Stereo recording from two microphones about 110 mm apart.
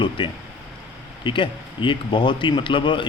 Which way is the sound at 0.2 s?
45° left (ahead or behind).